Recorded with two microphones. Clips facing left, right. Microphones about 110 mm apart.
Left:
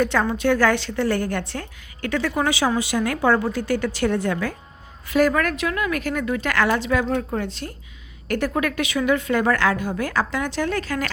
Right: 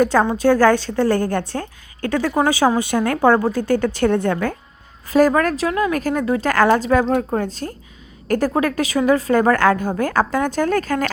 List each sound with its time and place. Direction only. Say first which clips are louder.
0.0 s a woman's voice: right 5 dB; 40° right (ahead or behind)
5.0 s a woman's voice: right 4 dB; 40° right (ahead or behind)